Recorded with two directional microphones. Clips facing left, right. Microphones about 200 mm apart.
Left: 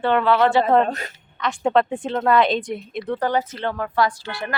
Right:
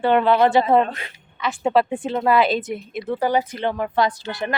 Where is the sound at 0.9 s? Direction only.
40° left (ahead or behind).